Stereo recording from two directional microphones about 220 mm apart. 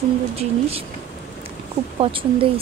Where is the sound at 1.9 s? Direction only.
25° right (ahead or behind).